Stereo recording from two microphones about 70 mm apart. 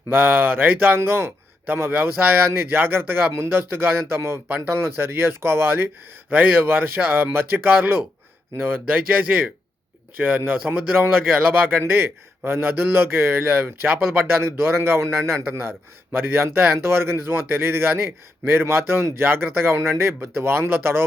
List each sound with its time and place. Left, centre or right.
0.1 s a man's voice: right
4.4 s speech: right
4.7 s a man's voice: right
10.2 s a man's voice: right